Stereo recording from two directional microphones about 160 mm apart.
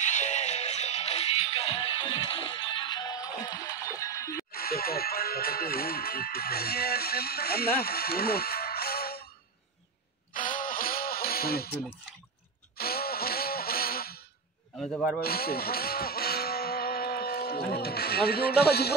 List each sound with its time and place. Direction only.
0.0 s music: 45° left (ahead or behind); by 4.5 s 20° left (ahead or behind)
4.5 s speech: 70° left (ahead or behind)
10.3 s a sound: 55° left (ahead or behind)
12.7 s a sound: 70° left (ahead or behind)
14.8 s a man's voice: 5° left (ahead or behind)
15.1 s speech: 75° left (ahead or behind)